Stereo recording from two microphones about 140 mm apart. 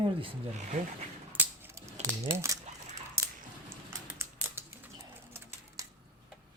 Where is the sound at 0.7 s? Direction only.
50° right (ahead or behind).